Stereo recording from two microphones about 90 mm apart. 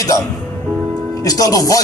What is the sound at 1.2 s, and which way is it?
Music, 40° left (ahead or behind).